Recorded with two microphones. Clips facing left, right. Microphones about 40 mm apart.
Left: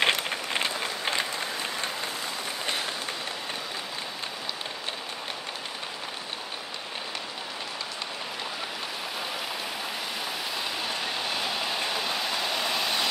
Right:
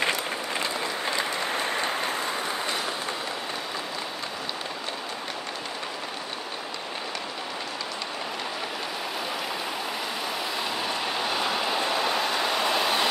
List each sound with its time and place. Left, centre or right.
0.0 s a sound: left
1.5 s applause: right
10.9 s vehicle: centre